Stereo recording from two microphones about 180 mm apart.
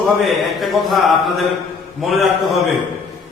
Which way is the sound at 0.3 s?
Centre (ahead or behind).